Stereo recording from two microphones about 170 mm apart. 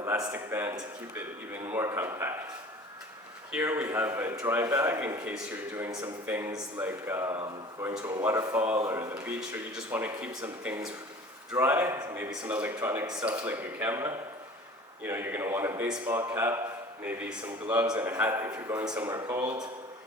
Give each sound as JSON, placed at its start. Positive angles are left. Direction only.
{"t": 0.0, "sound": "speech", "side_deg": -15}
{"t": 3.5, "sound": "a man's voice", "side_deg": -10}